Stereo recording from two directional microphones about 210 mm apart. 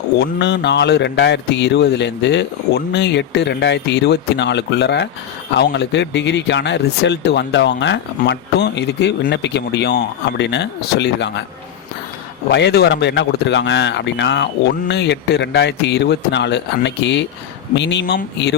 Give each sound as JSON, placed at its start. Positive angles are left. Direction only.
{"t": 0.2, "sound": "speech", "side_deg": 55}
{"t": 12.5, "sound": "speech", "side_deg": 55}